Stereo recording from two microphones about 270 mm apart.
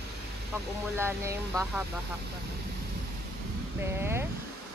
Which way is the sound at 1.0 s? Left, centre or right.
Centre.